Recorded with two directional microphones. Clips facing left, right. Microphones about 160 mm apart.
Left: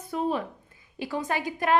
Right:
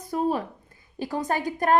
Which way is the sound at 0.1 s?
40° right (ahead or behind).